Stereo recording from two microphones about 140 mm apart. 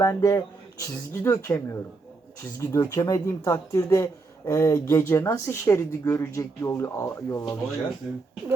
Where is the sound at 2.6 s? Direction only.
25° left (ahead or behind).